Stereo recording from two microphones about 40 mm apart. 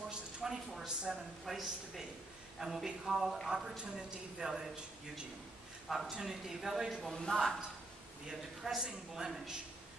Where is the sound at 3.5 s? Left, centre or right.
Centre.